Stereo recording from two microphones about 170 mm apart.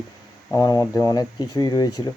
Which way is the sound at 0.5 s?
20° left (ahead or behind).